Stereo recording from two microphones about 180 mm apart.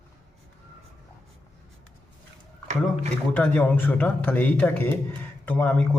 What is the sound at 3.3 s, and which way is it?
Speech, 5° left (ahead or behind).